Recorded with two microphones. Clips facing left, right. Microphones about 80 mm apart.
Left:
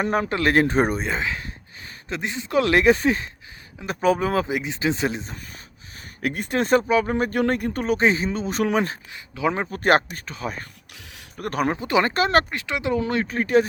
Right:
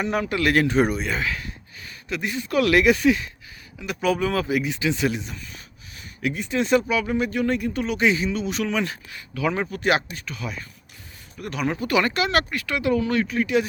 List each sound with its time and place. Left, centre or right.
0.0 s speech: left
6.2 s speech: left
6.8 s speech: left
9.1 s speech: left
11.3 s speech: left
11.7 s speech: left